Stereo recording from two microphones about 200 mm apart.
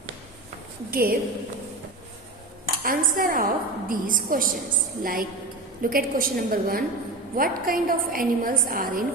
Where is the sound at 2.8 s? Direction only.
45° right (ahead or behind).